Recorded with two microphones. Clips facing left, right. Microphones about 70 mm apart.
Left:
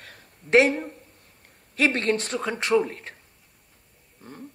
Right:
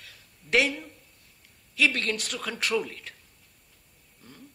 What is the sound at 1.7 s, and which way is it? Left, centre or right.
A man's voice, left.